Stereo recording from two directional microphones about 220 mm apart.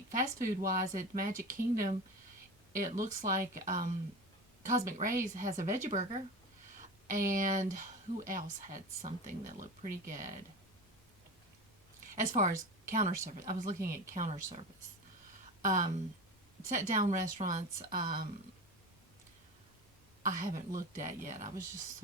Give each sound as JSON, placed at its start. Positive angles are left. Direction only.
{"t": 0.1, "sound": "speech", "side_deg": -35}
{"t": 11.9, "sound": "speech", "side_deg": -35}
{"t": 15.6, "sound": "speech", "side_deg": -35}
{"t": 20.2, "sound": "speech", "side_deg": -35}